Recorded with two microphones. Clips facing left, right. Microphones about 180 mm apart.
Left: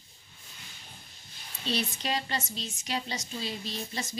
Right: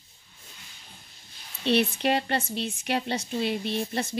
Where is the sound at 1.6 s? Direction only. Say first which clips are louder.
Right 9 dB; 60° right (ahead or behind).